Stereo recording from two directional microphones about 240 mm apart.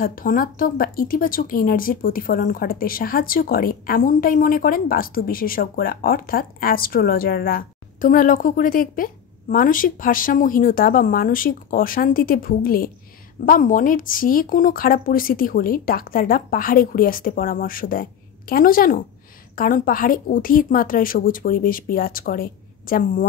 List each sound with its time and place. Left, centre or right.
0.0 s speech: left